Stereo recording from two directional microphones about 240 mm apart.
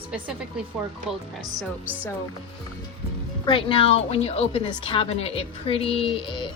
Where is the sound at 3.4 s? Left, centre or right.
Left.